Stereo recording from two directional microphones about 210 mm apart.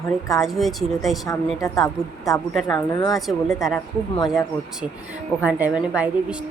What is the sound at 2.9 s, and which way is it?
Speech, 20° left (ahead or behind).